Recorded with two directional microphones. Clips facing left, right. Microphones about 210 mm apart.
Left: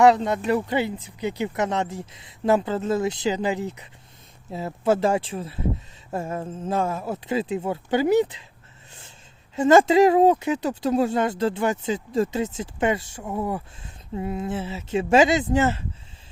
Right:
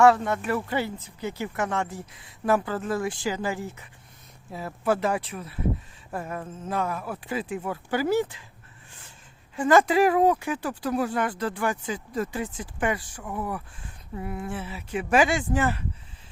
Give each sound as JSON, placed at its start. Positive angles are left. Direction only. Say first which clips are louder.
{"t": 0.0, "sound": "speech", "louder": "left 2 dB", "side_deg": 20}
{"t": 9.6, "sound": "speech", "louder": "left 4 dB", "side_deg": 25}